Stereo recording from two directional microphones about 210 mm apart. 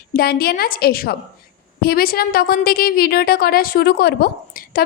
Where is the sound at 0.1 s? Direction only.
45° left (ahead or behind).